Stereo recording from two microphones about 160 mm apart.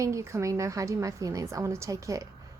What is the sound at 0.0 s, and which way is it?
A woman's voice, 20° right (ahead or behind).